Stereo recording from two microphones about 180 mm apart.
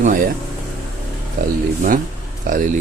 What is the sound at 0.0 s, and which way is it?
Speech, 50° right (ahead or behind).